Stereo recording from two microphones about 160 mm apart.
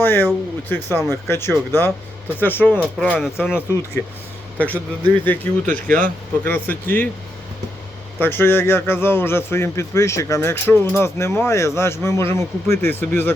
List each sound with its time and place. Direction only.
0.0 s a man's voice: 15° left (ahead or behind)
8.2 s a man's voice: 15° left (ahead or behind)